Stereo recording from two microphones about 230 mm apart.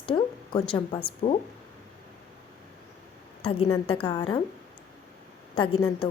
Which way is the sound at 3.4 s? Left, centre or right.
Left.